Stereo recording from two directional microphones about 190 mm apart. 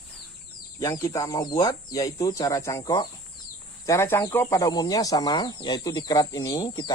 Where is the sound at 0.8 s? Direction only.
15° left (ahead or behind).